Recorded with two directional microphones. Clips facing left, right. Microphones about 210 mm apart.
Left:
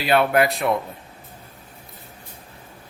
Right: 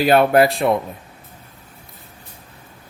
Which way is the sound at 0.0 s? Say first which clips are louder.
Right 5 dB; 40° right (ahead or behind).